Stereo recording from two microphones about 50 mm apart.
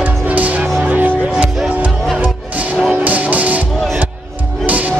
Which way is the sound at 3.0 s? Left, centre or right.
Right.